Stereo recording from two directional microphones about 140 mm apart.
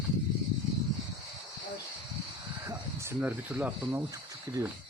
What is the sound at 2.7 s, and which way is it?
Speech, 20° right (ahead or behind).